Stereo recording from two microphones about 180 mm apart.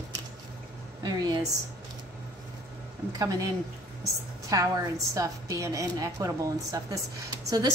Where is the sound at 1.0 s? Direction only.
25° right (ahead or behind).